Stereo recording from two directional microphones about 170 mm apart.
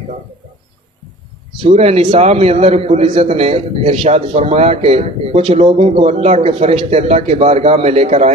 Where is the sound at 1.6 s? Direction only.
35° right (ahead or behind).